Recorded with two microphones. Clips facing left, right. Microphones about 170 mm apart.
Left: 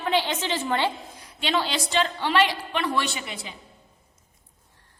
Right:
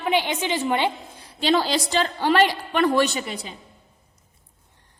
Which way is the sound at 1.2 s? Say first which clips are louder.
Right 7 dB; 35° right (ahead or behind).